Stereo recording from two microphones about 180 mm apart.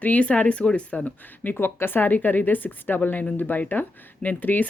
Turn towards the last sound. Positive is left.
turn(degrees=10)  # may be behind; listen again after turning